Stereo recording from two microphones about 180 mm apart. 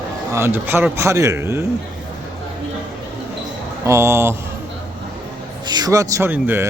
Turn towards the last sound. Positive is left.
turn(degrees=-10)  # may be behind; listen again after turning